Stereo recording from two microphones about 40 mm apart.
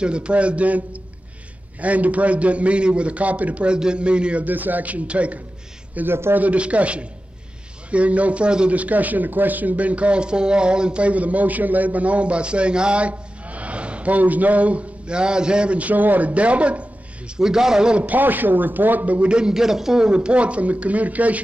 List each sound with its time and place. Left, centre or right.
0.0 s speech: right
3.6 s a man's voice: right
4.5 s speech: right
6.0 s speech: right
6.3 s speech: right
8.7 s speech: right
15.8 s speech: right
16.3 s speech: right
17.4 s a man's voice: centre
18.0 s speech: right
19.2 s a man's voice: right
20.1 s speech: right